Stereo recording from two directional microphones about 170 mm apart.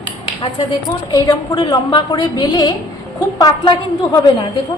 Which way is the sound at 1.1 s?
20° left (ahead or behind).